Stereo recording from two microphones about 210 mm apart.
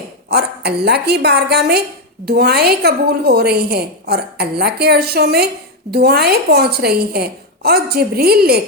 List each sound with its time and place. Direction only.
0.3 s a woman's voice: 50° right (ahead or behind)